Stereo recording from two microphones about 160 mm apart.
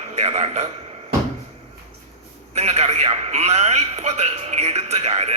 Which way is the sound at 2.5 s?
40° right (ahead or behind).